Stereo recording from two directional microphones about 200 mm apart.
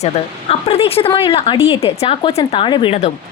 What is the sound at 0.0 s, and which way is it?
A woman's voice, 30° left (ahead or behind).